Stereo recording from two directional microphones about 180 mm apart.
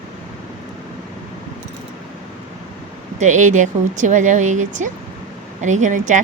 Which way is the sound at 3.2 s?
40° right (ahead or behind).